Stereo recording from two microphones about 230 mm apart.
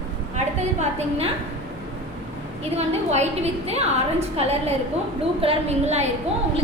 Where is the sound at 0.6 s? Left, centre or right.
Right.